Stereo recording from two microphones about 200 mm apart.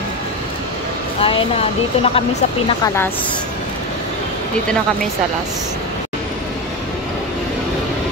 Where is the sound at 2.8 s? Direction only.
10° left (ahead or behind).